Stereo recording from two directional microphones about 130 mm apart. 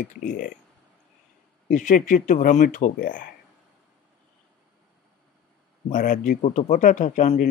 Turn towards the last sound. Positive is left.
turn(degrees=70)  # may be behind; listen again after turning